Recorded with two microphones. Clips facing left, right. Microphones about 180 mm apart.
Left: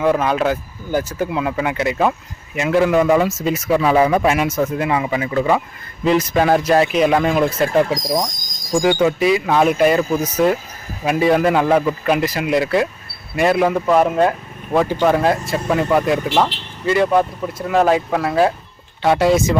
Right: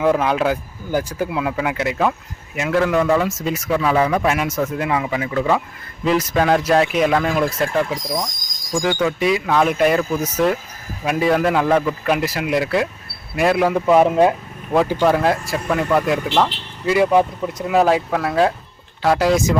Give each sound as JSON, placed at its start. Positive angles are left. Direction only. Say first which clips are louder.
{"t": 0.0, "sound": "a man's voice", "louder": "even", "side_deg": -10}
{"t": 3.2, "sound": "speech", "louder": "left 3 dB", "side_deg": 0}
{"t": 3.7, "sound": "speech", "louder": "left 3 dB", "side_deg": 15}
{"t": 7.1, "sound": "a man's voice", "louder": "left 2 dB", "side_deg": 10}
{"t": 7.9, "sound": "speech", "louder": "left 4 dB", "side_deg": 35}
{"t": 8.8, "sound": "a man's voice", "louder": "left 4 dB", "side_deg": 15}
{"t": 9.1, "sound": "speech", "louder": "left 2 dB", "side_deg": 0}
{"t": 14.1, "sound": "speech", "louder": "right 1 dB", "side_deg": -15}
{"t": 15.0, "sound": "speech", "louder": "left 1 dB", "side_deg": 0}
{"t": 16.9, "sound": "speech", "louder": "even", "side_deg": -10}
{"t": 17.7, "sound": "speech", "louder": "left 1 dB", "side_deg": 0}